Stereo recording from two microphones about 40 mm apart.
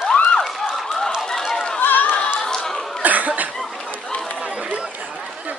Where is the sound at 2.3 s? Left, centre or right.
Centre.